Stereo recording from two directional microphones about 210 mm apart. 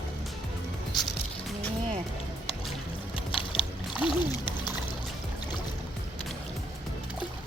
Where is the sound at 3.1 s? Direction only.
25° left (ahead or behind).